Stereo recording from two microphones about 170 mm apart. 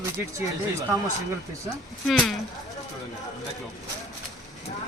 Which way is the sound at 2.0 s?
Centre (ahead or behind).